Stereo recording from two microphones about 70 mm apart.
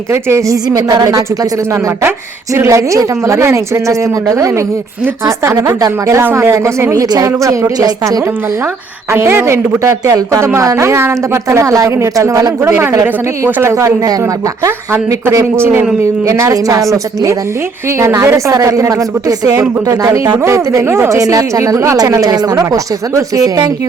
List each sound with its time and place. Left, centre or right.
0.1 s speech: right
0.4 s speech: right
1.7 s speech: right
5.5 s speech: right
6.2 s speech: right
6.9 s speech: right
9.1 s speech: right
12.7 s speech: right
15.5 s speech: right
16.2 s speech: right
18.0 s speech: right
20.4 s speech: right
21.1 s speech: right